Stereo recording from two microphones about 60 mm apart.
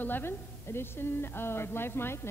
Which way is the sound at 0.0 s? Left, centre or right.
Left.